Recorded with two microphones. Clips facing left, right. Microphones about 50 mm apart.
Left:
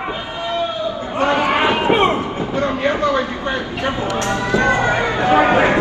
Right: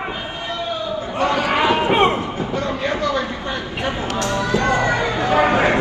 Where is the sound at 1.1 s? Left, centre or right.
Left.